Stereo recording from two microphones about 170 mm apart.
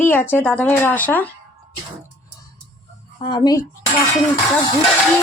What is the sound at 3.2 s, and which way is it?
Speech, 25° left (ahead or behind).